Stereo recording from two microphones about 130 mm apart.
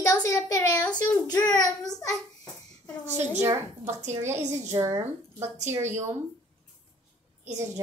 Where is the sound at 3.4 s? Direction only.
20° right (ahead or behind).